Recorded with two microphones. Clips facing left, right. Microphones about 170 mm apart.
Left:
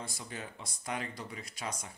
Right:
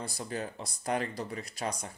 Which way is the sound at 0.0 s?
35° right (ahead or behind).